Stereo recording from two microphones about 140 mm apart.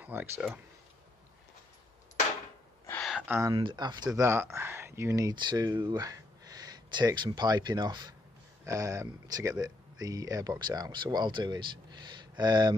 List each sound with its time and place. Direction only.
0.0 s speech: 10° right (ahead or behind)
3.3 s speech: 20° right (ahead or behind)
3.5 s speech: 35° right (ahead or behind)
5.3 s speech: 30° right (ahead or behind)